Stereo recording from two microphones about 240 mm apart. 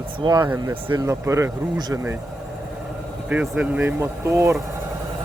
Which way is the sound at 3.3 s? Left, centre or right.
Centre.